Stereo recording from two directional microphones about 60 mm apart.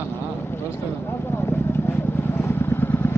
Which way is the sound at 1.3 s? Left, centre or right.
Left.